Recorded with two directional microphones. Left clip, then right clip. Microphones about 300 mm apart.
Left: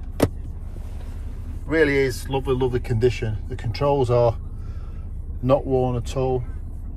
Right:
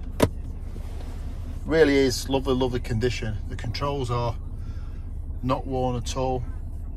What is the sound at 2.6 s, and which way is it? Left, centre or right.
Speech, centre.